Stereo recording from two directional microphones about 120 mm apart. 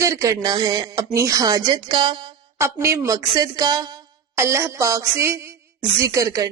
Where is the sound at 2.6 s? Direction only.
25° right (ahead or behind).